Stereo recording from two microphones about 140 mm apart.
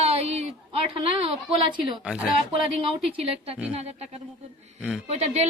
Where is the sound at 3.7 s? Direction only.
50° right (ahead or behind).